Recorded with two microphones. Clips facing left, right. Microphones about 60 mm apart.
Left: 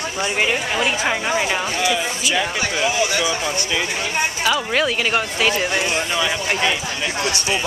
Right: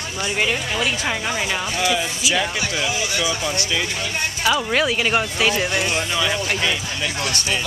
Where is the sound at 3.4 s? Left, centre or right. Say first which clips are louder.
Left 1 dB; centre.